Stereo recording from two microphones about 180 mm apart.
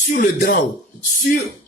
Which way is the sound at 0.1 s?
50° left (ahead or behind).